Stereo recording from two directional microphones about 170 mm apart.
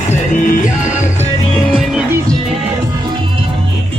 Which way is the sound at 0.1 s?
50° left (ahead or behind).